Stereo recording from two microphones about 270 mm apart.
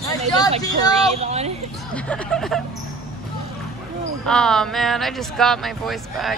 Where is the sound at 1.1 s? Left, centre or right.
Right.